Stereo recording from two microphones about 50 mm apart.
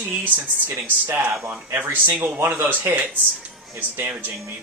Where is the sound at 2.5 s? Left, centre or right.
Right.